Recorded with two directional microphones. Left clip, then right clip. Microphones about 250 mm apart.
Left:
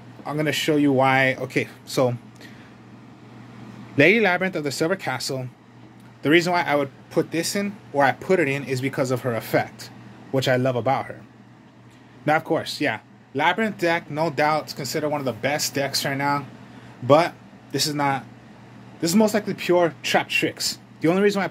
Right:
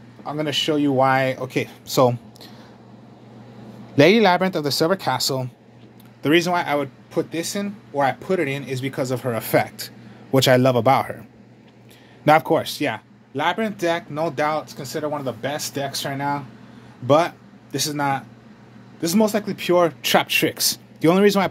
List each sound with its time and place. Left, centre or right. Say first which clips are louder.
0.2 s speech: right 1 dB; centre
3.9 s speech: right 3 dB; centre
12.3 s speech: right 5 dB; centre